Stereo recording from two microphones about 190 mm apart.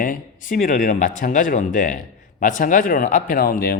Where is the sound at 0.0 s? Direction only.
45° left (ahead or behind).